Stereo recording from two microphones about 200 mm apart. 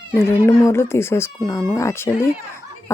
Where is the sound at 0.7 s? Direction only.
10° left (ahead or behind).